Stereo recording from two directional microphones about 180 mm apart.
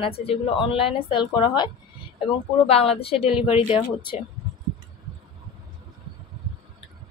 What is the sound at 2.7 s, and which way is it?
A woman's voice, 30° left (ahead or behind).